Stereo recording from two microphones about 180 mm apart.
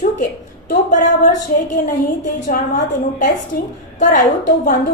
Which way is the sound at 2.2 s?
45° left (ahead or behind).